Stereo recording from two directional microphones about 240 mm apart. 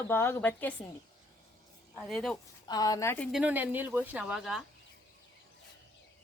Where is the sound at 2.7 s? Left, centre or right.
Centre.